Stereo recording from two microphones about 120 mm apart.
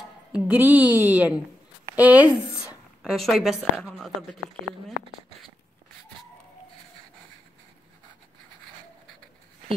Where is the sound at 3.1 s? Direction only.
Centre (ahead or behind).